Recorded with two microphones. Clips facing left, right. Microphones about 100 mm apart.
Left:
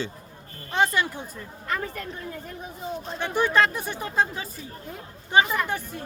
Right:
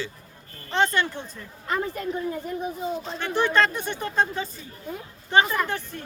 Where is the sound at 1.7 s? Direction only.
20° right (ahead or behind).